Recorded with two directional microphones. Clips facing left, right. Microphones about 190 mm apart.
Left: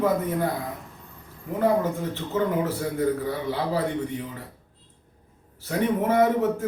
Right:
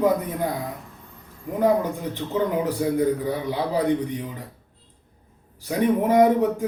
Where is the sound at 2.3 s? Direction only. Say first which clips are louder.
Right 1 dB; 15° right (ahead or behind).